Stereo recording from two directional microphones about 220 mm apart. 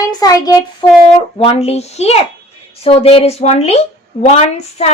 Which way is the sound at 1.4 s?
25° left (ahead or behind).